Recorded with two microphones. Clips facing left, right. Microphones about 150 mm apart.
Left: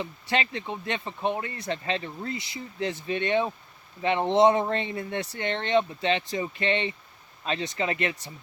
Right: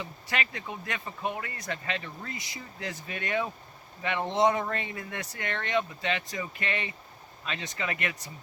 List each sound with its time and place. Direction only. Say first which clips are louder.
0.0 s speech: left 5 dB; 30° left (ahead or behind)